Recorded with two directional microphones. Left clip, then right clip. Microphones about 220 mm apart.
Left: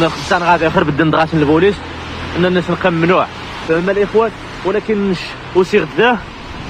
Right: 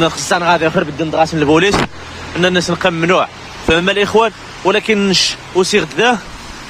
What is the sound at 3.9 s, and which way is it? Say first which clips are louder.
Speech: even; 50° right (ahead or behind).